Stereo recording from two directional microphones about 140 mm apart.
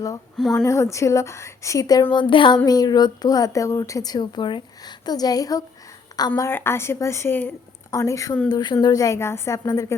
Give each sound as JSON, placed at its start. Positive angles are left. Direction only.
{"t": 0.5, "sound": "a woman's voice", "side_deg": 20}